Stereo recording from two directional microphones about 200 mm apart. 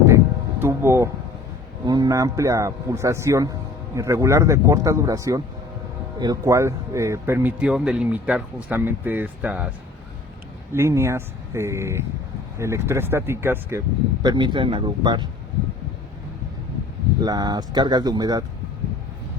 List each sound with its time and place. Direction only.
0.6 s a sound: 10° right (ahead or behind)
1.8 s speech: 20° right (ahead or behind)
17.2 s speech: 20° right (ahead or behind)